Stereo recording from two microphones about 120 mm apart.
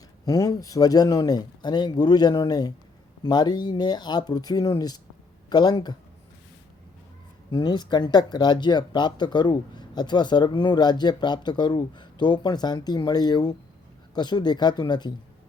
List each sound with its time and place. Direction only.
0.3 s speech: 30° left (ahead or behind)
7.5 s speech: 35° left (ahead or behind)